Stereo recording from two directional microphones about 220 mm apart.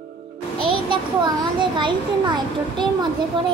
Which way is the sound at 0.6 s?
20° right (ahead or behind).